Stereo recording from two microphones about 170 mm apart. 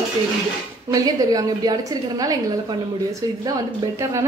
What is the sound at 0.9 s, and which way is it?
Speech, 20° right (ahead or behind).